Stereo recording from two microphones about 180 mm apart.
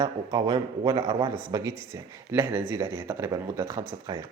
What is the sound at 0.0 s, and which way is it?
Speech, 20° right (ahead or behind).